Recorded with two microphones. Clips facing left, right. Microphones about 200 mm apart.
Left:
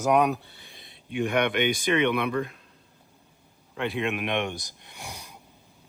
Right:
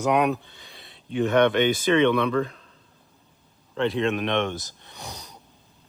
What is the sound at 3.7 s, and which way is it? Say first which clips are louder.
Speech: right 5 dB; 15° left (ahead or behind).